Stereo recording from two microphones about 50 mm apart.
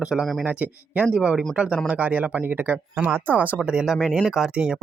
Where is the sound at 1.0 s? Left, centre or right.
Centre.